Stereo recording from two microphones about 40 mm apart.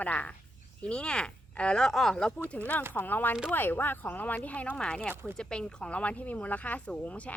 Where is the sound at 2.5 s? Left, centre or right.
Left.